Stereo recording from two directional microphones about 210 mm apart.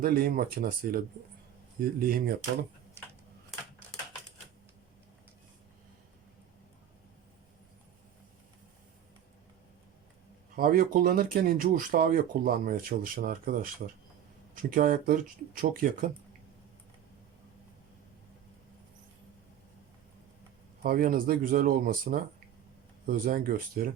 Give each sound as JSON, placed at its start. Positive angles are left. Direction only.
{"t": 0.0, "sound": "speech", "side_deg": -45}
{"t": 10.5, "sound": "speech", "side_deg": -45}
{"t": 20.8, "sound": "speech", "side_deg": -45}